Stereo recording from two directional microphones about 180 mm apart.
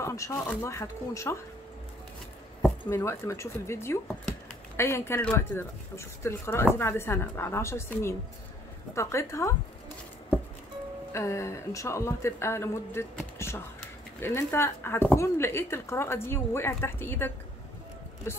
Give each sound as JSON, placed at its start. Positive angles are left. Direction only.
{"t": 0.0, "sound": "speech", "side_deg": 15}
{"t": 2.9, "sound": "speech", "side_deg": 15}
{"t": 11.1, "sound": "speech", "side_deg": 15}